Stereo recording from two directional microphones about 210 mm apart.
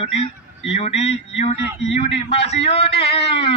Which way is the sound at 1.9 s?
30° left (ahead or behind).